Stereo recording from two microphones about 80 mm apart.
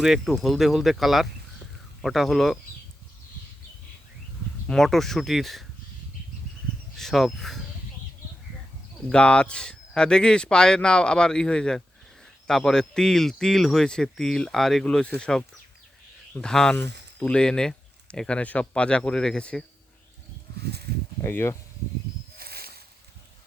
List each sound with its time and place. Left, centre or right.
0.0 s speech: centre
4.7 s speech: centre
6.9 s speech: centre
9.0 s speech: centre
21.2 s speech: left